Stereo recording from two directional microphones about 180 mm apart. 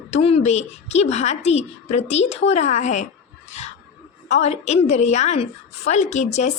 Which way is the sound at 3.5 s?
40° left (ahead or behind).